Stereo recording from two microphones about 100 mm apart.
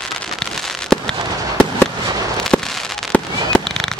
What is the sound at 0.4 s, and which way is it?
Fireworks, 5° left (ahead or behind).